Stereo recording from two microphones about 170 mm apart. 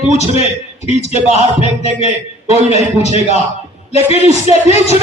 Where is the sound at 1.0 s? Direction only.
40° right (ahead or behind).